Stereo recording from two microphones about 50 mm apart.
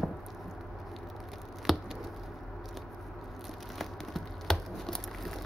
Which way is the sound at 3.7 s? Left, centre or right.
Centre.